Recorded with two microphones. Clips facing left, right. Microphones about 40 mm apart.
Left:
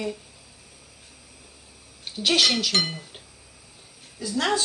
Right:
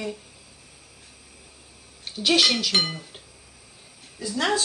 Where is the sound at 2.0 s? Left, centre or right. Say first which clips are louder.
Right 1 dB; centre.